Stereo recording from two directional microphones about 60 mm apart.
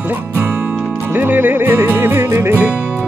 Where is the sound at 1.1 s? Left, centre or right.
Right.